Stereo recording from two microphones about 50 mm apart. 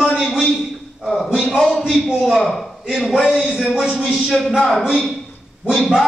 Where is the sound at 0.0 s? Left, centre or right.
Centre.